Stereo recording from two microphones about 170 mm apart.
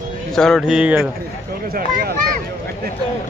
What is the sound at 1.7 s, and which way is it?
Speech, 65° right (ahead or behind).